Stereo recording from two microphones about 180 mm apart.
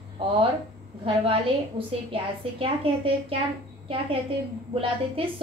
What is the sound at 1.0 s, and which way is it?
Speech, 30° right (ahead or behind).